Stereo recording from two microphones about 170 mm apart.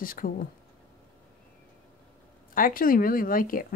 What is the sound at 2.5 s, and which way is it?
Speech, 55° left (ahead or behind).